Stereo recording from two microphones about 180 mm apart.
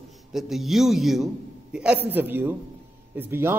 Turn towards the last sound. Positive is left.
turn(degrees=-10)  # may be behind; listen again after turning